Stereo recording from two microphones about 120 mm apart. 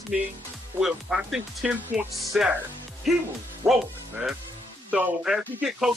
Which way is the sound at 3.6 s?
20° right (ahead or behind).